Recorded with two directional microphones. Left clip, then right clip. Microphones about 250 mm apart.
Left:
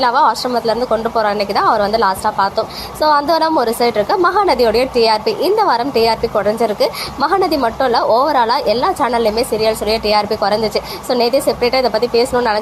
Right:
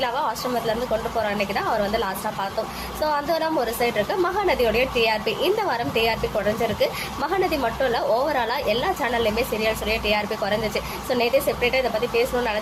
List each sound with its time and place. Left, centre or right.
0.0 s a woman's voice: left